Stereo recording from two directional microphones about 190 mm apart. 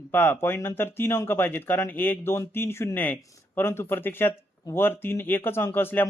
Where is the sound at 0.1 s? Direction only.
10° left (ahead or behind).